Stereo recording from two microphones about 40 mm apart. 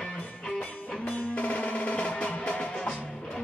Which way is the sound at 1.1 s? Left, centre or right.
Left.